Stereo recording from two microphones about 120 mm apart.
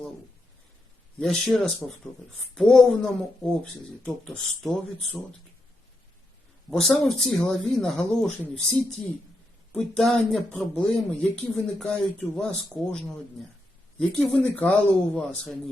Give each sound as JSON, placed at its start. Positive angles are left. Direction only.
{"t": 1.2, "sound": "speech", "side_deg": 5}
{"t": 1.8, "sound": "speech", "side_deg": 25}
{"t": 2.6, "sound": "speech", "side_deg": 5}
{"t": 6.7, "sound": "speech", "side_deg": 5}
{"t": 14.0, "sound": "speech", "side_deg": 10}